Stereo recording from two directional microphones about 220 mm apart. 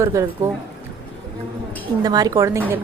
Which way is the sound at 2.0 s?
15° right (ahead or behind).